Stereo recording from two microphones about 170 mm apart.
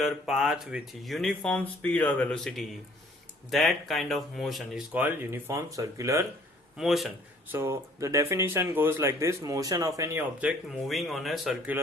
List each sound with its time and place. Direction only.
0.0 s speech: centre (ahead or behind); by 6.2 s 20° right (ahead or behind)
6.7 s speech: centre (ahead or behind)
7.5 s speech: 15° right (ahead or behind)
10.7 s speech: centre (ahead or behind)